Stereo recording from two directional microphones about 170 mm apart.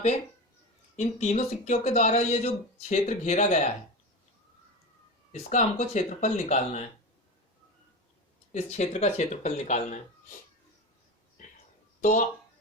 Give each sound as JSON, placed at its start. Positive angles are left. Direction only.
{"t": 0.9, "sound": "speech", "side_deg": 45}
{"t": 5.3, "sound": "speech", "side_deg": 45}
{"t": 8.5, "sound": "speech", "side_deg": 40}
{"t": 11.9, "sound": "speech", "side_deg": 45}